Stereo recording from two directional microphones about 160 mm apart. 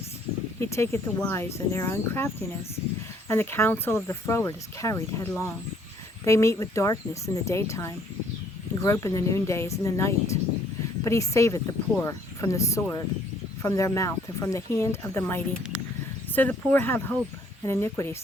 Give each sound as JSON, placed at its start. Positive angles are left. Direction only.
{"t": 0.6, "sound": "speech", "side_deg": 15}